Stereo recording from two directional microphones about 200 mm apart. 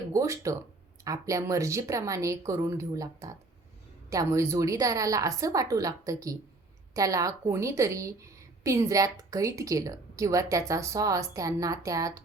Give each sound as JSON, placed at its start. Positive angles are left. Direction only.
{"t": 0.1, "sound": "a woman's voice", "side_deg": -15}